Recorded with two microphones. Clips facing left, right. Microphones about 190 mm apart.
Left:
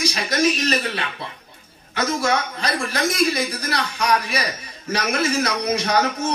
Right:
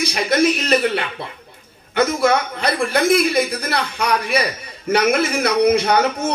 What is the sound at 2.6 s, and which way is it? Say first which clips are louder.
A man's voice: right 5 dB; 60° right (ahead or behind).